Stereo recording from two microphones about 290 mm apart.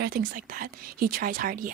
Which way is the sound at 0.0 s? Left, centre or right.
Right.